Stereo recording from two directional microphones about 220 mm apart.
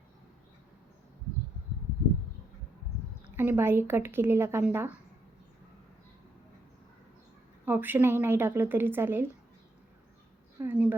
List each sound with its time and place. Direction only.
3.3 s speech: 10° right (ahead or behind)
7.6 s speech: 10° right (ahead or behind)
10.6 s speech: 10° right (ahead or behind)